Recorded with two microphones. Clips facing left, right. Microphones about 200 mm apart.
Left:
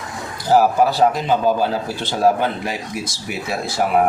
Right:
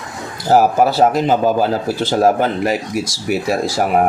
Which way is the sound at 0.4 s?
45° right (ahead or behind).